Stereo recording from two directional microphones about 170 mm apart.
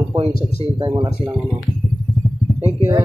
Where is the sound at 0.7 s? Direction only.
25° right (ahead or behind).